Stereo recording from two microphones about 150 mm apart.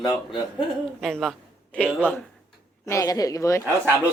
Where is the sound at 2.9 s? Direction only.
20° left (ahead or behind).